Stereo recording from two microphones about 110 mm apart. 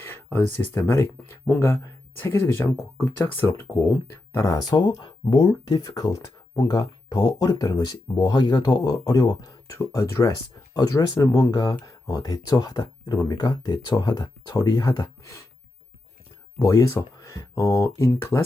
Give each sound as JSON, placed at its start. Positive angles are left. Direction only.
{"t": 0.0, "sound": "speech", "side_deg": 20}
{"t": 9.7, "sound": "speech", "side_deg": 25}
{"t": 16.6, "sound": "speech", "side_deg": 30}